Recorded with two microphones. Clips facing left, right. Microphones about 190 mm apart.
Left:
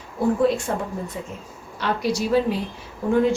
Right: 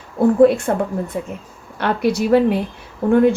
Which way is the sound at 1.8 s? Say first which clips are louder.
Right 5 dB; 60° right (ahead or behind).